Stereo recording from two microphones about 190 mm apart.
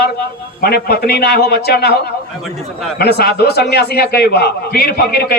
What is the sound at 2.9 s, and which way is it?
A man's voice, 55° left (ahead or behind).